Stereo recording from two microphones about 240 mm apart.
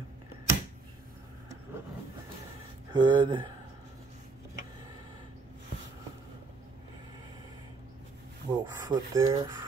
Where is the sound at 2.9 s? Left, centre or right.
Centre.